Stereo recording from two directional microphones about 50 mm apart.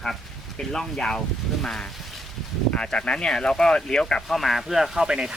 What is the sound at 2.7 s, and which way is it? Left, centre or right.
Speech, centre.